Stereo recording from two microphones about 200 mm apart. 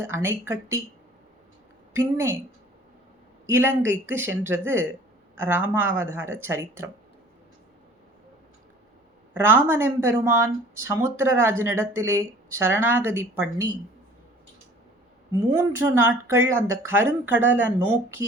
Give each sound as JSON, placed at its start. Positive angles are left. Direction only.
{"t": 0.0, "sound": "speech", "side_deg": -10}
{"t": 1.9, "sound": "speech", "side_deg": -10}
{"t": 3.5, "sound": "speech", "side_deg": -10}
{"t": 9.3, "sound": "speech", "side_deg": -10}
{"t": 15.5, "sound": "speech", "side_deg": -10}
{"t": 17.3, "sound": "speech", "side_deg": -65}